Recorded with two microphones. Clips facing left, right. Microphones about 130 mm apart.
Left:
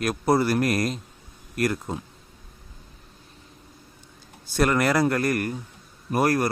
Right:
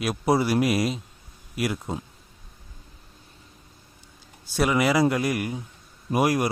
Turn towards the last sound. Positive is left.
turn(degrees=-10)  # may be behind; listen again after turning